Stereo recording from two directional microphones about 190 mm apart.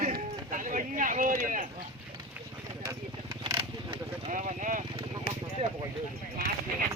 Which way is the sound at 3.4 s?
25° right (ahead or behind).